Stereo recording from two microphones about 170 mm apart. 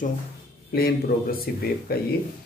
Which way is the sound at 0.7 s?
65° left (ahead or behind).